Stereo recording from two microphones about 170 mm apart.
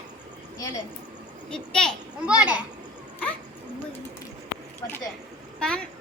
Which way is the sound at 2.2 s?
5° right (ahead or behind).